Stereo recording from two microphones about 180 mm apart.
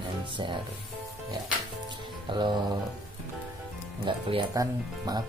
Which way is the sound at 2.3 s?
25° right (ahead or behind).